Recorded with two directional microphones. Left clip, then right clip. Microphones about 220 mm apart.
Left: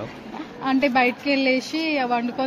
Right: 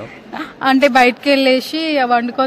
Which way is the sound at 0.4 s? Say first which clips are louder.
Right 9 dB; 55° right (ahead or behind).